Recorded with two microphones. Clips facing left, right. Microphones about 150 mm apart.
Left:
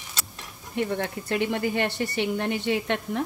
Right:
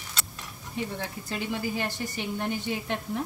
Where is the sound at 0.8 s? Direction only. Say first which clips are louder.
Left 6 dB; 65° left (ahead or behind).